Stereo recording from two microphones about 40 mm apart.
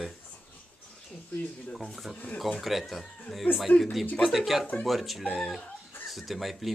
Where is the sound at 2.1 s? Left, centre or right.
Left.